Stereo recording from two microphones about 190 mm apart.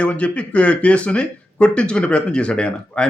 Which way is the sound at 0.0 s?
5° left (ahead or behind).